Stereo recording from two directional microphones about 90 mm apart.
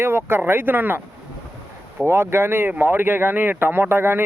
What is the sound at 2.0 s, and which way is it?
Speech, 30° right (ahead or behind).